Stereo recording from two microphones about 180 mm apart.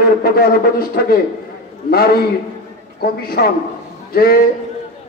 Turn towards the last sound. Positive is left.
turn(degrees=55)  # may be behind; listen again after turning